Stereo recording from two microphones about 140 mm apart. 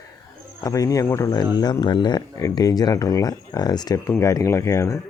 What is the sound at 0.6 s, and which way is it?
Speech, 25° left (ahead or behind).